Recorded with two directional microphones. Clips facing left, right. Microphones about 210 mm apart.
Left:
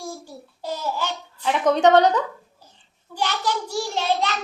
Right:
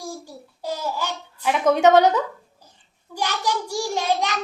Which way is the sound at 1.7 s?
10° right (ahead or behind).